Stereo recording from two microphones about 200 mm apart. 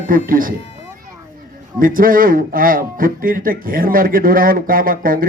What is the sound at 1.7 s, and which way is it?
Speech, 45° right (ahead or behind).